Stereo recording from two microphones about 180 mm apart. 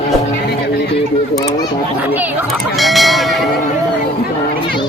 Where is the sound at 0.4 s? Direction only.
65° left (ahead or behind).